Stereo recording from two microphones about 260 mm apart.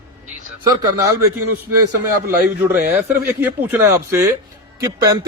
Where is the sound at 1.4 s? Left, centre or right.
Right.